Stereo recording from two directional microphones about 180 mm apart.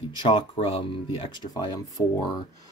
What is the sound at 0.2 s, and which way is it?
Speech, 25° left (ahead or behind).